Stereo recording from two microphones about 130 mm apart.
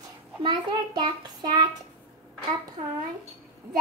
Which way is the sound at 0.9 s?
35° right (ahead or behind).